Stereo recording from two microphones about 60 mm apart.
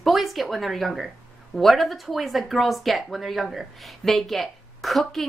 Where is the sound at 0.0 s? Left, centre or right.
Centre.